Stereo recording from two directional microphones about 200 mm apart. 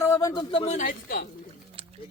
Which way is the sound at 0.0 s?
15° left (ahead or behind).